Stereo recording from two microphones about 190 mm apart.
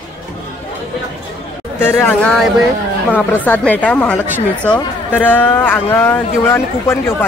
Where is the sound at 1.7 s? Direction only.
10° left (ahead or behind).